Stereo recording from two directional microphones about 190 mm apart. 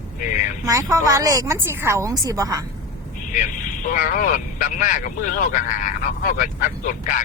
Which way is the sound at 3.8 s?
45° left (ahead or behind).